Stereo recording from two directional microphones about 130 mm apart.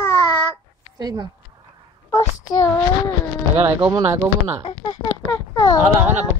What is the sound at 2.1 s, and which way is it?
Speech, 25° left (ahead or behind).